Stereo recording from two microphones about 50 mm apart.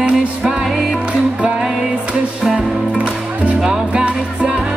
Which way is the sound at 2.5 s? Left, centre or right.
Right.